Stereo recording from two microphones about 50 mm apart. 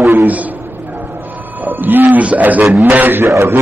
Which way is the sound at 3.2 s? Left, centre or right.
Right.